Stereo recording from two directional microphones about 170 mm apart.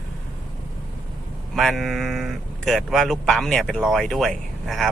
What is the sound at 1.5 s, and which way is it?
Speech, centre (ahead or behind).